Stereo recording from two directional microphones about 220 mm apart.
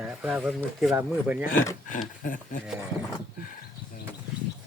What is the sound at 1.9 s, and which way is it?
Speech, 40° left (ahead or behind).